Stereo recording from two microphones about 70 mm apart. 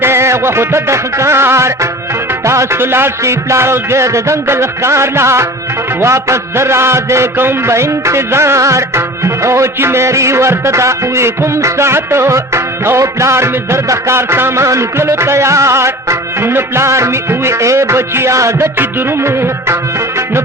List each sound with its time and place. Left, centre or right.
0.0 s music: right